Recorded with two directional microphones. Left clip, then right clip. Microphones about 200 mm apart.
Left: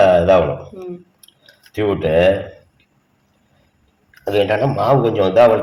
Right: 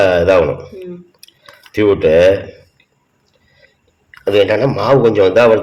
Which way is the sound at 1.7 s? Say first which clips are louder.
Right 6 dB; 50° right (ahead or behind).